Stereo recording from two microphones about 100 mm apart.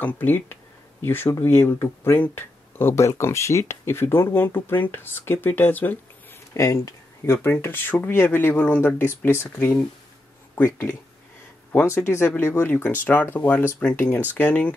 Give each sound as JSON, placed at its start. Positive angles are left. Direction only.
{"t": 0.0, "sound": "speech", "side_deg": 20}
{"t": 6.5, "sound": "speech", "side_deg": 30}